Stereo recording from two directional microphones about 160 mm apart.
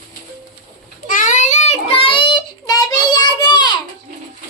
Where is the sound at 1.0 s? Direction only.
55° left (ahead or behind); by 3.8 s 25° left (ahead or behind).